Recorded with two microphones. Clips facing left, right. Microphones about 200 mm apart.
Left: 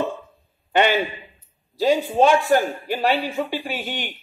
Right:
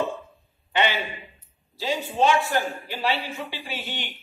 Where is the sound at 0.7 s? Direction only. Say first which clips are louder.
Left 6 dB; 50° left (ahead or behind).